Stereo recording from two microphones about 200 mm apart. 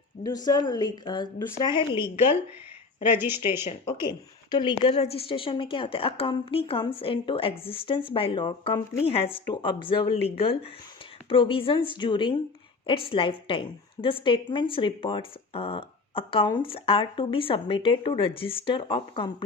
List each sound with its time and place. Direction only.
0.2 s a woman's voice: 20° left (ahead or behind)
3.2 s speech: 10° right (ahead or behind)
4.5 s a woman's voice: 25° left (ahead or behind)